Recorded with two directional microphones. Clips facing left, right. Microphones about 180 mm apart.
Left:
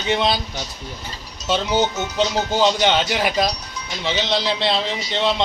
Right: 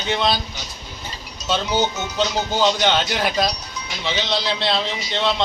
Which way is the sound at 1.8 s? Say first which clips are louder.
Left 1 dB; 15° left (ahead or behind).